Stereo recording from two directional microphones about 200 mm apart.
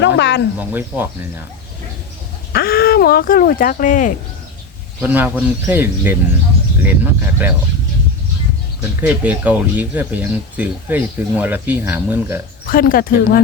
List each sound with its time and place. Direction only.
0.0 s speech: 60° left (ahead or behind)
0.7 s speech: 10° right (ahead or behind)
2.5 s speech: 50° left (ahead or behind)
4.9 s speech: 10° right (ahead or behind)
9.0 s speech: 10° right (ahead or behind)
12.6 s speech: 45° left (ahead or behind)